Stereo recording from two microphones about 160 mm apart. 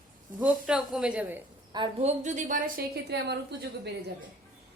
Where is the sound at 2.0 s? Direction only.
45° right (ahead or behind); by 3.3 s 90° right.